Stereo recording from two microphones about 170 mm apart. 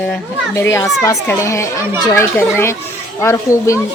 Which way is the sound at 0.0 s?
10° left (ahead or behind).